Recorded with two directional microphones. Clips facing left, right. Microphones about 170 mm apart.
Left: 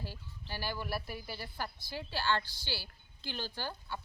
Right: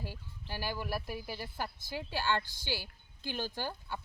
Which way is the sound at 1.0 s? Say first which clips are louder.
Right 3 dB; 45° right (ahead or behind).